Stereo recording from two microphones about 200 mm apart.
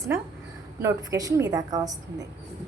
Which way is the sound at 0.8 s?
15° right (ahead or behind).